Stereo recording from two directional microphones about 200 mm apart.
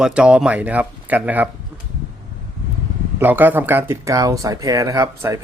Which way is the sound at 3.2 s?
10° right (ahead or behind).